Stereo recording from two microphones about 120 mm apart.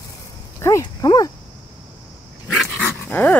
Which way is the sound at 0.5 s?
25° left (ahead or behind).